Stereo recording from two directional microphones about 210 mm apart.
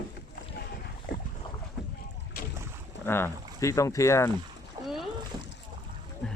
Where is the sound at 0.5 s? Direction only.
45° left (ahead or behind).